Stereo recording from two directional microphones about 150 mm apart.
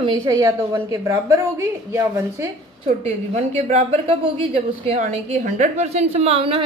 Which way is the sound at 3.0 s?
45° right (ahead or behind).